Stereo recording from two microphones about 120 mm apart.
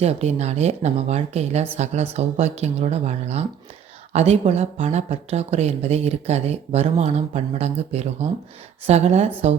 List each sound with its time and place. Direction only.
0.0 s speech: 60° right (ahead or behind)